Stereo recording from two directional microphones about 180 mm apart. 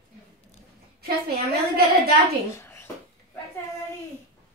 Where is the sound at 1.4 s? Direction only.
60° right (ahead or behind).